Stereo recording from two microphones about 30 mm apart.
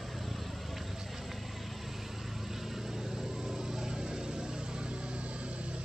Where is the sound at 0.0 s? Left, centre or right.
Centre.